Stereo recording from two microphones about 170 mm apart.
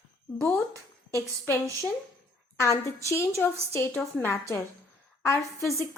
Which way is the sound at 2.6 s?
15° left (ahead or behind).